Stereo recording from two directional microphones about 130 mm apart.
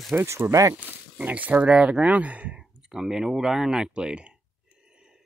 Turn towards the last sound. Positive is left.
turn(degrees=-5)  # may be behind; listen again after turning